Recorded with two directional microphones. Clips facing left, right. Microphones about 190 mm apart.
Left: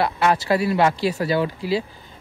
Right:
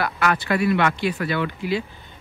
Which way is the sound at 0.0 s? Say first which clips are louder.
Left 3 dB; 30° left (ahead or behind).